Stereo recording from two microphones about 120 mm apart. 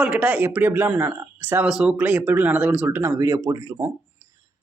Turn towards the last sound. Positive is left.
turn(degrees=-25)  # may be behind; listen again after turning